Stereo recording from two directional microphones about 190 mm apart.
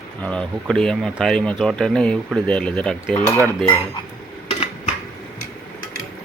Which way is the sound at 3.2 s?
15° right (ahead or behind).